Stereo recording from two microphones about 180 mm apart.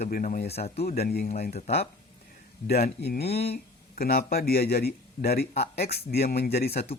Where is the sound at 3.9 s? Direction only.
55° left (ahead or behind).